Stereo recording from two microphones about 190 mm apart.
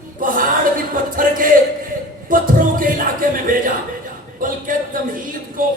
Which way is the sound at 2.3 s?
45° right (ahead or behind).